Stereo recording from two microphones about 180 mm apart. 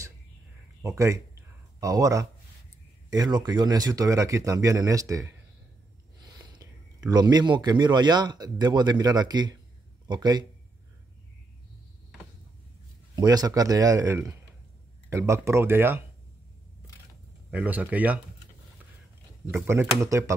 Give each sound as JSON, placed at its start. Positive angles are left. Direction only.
{"t": 0.8, "sound": "a man's voice", "side_deg": -15}
{"t": 13.1, "sound": "speech", "side_deg": -20}
{"t": 17.5, "sound": "speech", "side_deg": -10}
{"t": 19.5, "sound": "speech", "side_deg": -10}